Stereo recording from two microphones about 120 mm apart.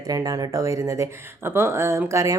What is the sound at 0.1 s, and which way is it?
A woman's voice, 30° right (ahead or behind).